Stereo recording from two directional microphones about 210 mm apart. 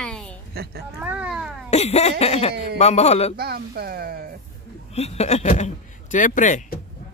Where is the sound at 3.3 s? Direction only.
50° right (ahead or behind).